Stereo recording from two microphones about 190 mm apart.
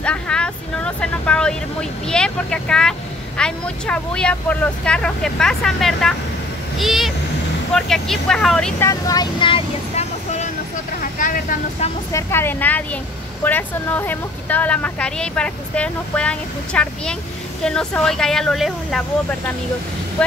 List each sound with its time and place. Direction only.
0.0 s speech: 5° left (ahead or behind)
8.8 s speech: 20° left (ahead or behind)
11.0 s speech: 45° left (ahead or behind)
12.1 s speech: 15° left (ahead or behind)